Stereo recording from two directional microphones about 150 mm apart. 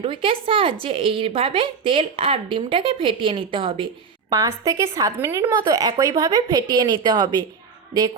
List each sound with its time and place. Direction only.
0.0 s a woman's voice: 35° right (ahead or behind)
4.3 s a woman's voice: 20° right (ahead or behind)